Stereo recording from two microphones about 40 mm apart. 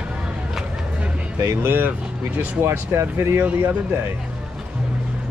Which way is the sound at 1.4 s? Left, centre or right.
Right.